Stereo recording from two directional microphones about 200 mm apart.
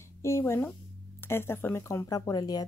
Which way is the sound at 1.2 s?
10° left (ahead or behind).